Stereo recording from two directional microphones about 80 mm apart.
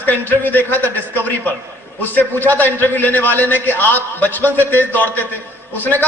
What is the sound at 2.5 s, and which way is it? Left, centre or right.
A man's voice, left.